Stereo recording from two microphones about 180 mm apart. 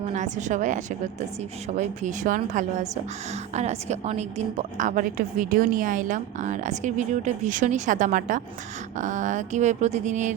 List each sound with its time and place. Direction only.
0.0 s a woman's voice: 40° right (ahead or behind)